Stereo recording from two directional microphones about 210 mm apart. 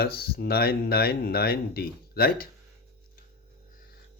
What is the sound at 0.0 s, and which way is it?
Speech, 45° left (ahead or behind).